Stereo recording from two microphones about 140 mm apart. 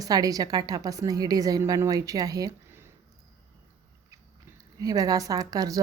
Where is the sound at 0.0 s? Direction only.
25° right (ahead or behind).